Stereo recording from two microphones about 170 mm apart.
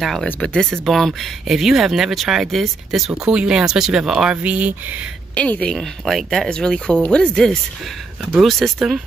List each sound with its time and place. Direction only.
0.0 s speech: centre (ahead or behind)
5.3 s speech: 5° left (ahead or behind)